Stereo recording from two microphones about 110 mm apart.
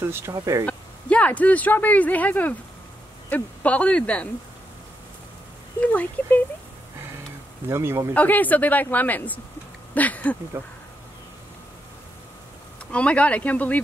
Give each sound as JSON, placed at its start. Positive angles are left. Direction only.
{"t": 0.0, "sound": "speech", "side_deg": -25}
{"t": 0.7, "sound": "speech", "side_deg": 10}
{"t": 5.8, "sound": "speech", "side_deg": 15}
{"t": 7.6, "sound": "speech", "side_deg": -20}
{"t": 8.1, "sound": "speech", "side_deg": 15}
{"t": 10.6, "sound": "speech", "side_deg": -20}
{"t": 12.9, "sound": "speech", "side_deg": 10}